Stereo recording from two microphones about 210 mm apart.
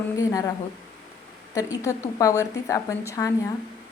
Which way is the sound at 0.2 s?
15° left (ahead or behind).